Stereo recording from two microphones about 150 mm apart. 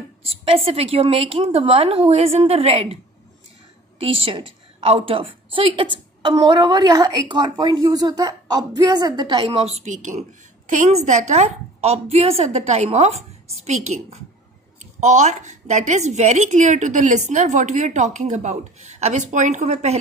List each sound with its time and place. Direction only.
0.2 s a woman's voice: 40° right (ahead or behind)
4.0 s a woman's voice: 40° right (ahead or behind)
9.8 s a woman's voice: 50° right (ahead or behind)